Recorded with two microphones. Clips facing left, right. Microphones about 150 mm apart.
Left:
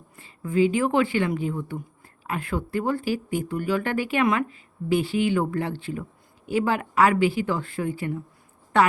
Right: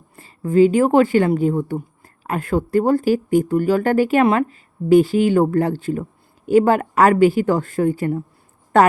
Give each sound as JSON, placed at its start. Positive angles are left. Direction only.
{"t": 0.2, "sound": "a woman's voice", "side_deg": -40}